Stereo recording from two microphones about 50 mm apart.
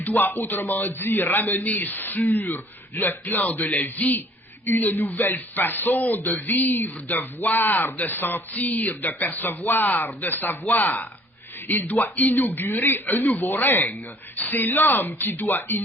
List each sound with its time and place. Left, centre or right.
0.1 s speech: left